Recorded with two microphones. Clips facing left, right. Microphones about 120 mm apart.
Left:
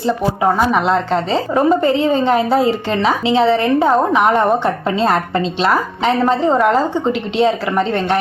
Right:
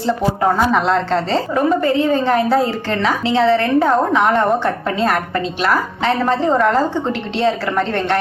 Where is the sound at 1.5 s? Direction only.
30° left (ahead or behind).